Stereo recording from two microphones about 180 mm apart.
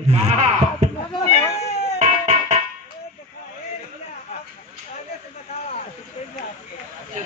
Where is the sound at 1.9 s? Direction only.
40° right (ahead or behind).